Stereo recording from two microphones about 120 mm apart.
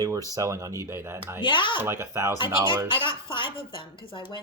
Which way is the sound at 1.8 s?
20° right (ahead or behind).